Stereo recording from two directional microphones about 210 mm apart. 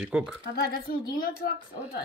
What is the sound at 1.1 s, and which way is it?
Speech, 45° left (ahead or behind).